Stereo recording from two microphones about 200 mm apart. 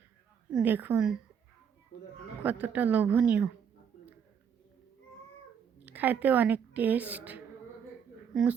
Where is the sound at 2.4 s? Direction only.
10° right (ahead or behind).